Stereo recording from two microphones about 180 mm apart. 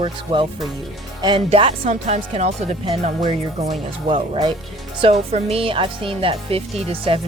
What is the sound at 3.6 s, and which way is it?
Speech, 40° right (ahead or behind).